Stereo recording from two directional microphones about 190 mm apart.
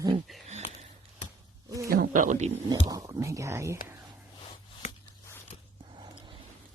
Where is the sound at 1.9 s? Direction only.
50° right (ahead or behind).